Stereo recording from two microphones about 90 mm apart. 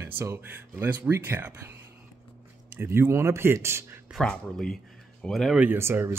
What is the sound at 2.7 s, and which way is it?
Speech, 25° right (ahead or behind).